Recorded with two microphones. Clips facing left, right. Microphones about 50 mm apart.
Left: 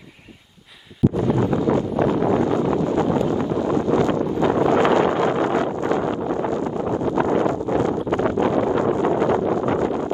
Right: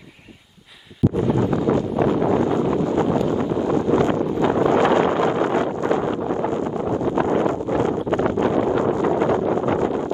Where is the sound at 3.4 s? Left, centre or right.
Centre.